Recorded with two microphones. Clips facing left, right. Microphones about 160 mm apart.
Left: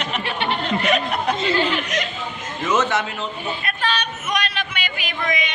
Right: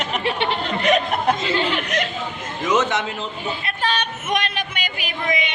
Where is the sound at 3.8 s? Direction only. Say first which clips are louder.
Right 2 dB; 50° right (ahead or behind).